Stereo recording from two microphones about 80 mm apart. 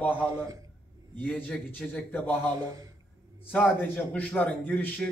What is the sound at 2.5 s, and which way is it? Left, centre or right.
Speech, right.